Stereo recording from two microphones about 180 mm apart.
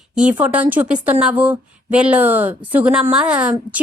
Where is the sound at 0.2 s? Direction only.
5° right (ahead or behind).